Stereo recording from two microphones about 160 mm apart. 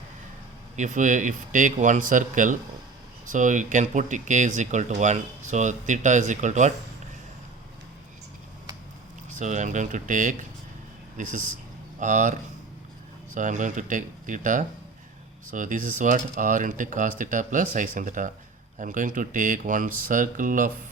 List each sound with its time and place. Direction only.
0.8 s speech: 50° right (ahead or behind)
9.3 s speech: 50° right (ahead or behind)